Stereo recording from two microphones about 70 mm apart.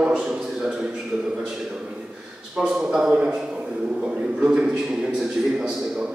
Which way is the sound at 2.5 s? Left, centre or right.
Centre.